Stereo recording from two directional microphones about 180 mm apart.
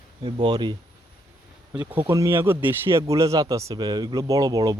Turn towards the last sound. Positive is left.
turn(degrees=-20)  # may be behind; listen again after turning